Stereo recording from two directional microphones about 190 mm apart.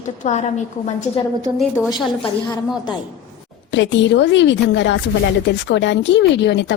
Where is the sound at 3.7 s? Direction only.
70° left (ahead or behind).